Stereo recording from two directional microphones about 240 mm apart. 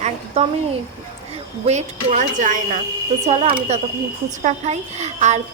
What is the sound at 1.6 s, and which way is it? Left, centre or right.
A woman's voice, right.